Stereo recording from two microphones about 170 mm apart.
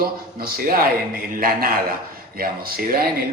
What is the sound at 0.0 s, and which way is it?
A man's voice, 60° right (ahead or behind).